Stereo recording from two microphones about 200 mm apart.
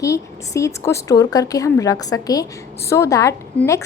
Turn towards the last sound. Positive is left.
turn(degrees=15)  # may be behind; listen again after turning